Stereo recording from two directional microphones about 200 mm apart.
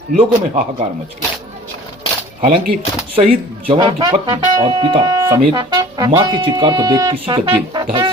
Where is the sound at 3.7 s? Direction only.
20° right (ahead or behind).